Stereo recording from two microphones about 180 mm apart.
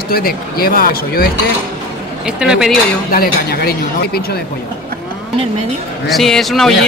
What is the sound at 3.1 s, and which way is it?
Speech, 55° left (ahead or behind).